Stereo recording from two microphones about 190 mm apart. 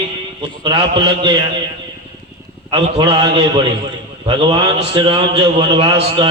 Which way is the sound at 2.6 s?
25° right (ahead or behind).